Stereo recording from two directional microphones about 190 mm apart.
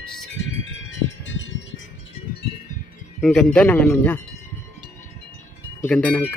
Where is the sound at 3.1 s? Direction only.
5° left (ahead or behind).